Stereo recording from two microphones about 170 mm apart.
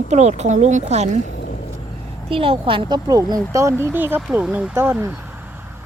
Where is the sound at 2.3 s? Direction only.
30° right (ahead or behind); by 5.2 s 10° right (ahead or behind).